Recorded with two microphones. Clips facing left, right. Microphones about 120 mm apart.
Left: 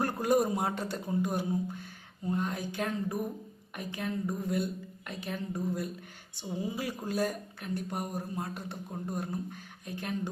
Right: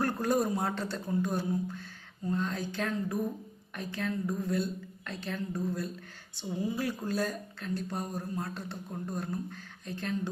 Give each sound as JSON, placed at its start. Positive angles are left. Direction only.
{"t": 0.0, "sound": "speech", "side_deg": 15}